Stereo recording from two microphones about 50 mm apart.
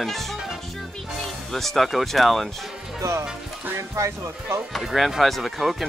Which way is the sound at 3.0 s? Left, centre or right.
Right.